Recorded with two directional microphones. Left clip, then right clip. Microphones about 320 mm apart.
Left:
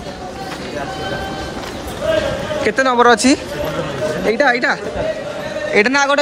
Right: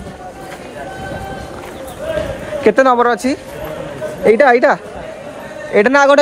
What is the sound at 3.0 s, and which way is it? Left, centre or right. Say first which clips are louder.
Speech: left 4 dB; centre.